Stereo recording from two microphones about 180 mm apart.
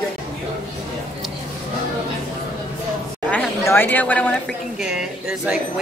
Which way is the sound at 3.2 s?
10° left (ahead or behind).